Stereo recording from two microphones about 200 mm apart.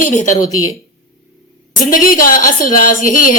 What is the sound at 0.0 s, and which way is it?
Speech, 40° left (ahead or behind).